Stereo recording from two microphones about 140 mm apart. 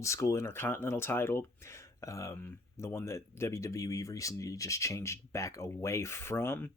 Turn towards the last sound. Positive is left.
turn(degrees=15)  # may be behind; listen again after turning